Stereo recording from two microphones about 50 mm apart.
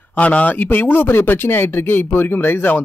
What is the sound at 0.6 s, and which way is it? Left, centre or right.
Speech, left.